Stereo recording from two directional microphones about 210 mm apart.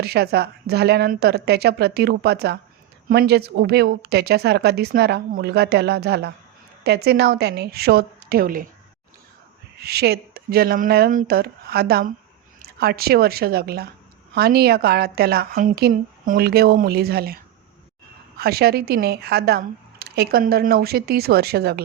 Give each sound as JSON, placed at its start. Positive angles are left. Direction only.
{"t": 0.0, "sound": "speech", "side_deg": -50}
{"t": 9.7, "sound": "speech", "side_deg": -50}